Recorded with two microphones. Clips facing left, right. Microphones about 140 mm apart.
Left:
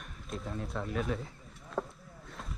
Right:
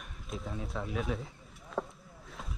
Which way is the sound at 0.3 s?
Centre (ahead or behind).